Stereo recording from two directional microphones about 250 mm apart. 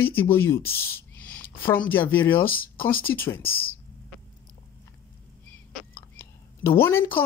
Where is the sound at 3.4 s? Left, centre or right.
Left.